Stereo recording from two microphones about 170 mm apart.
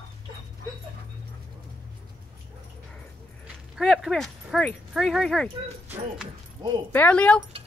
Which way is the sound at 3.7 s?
Centre (ahead or behind).